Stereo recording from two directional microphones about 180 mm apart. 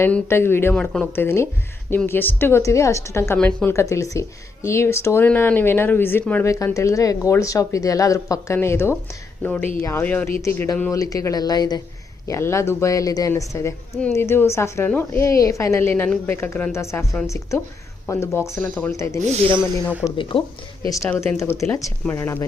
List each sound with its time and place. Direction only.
0.0 s speech: 15° left (ahead or behind)
19.3 s speech: 30° right (ahead or behind)
20.1 s speech: 30° left (ahead or behind)
21.1 s speech: 10° left (ahead or behind)